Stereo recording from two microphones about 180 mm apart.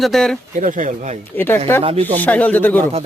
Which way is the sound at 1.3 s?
10° left (ahead or behind).